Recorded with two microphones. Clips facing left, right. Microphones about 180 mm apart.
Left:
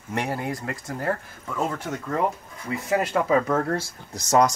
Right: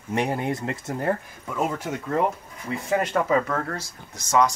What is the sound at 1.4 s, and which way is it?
Speech, 10° right (ahead or behind).